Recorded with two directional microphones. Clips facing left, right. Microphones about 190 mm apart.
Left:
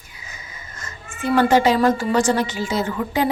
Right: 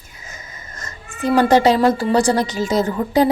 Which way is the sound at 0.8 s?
40° right (ahead or behind).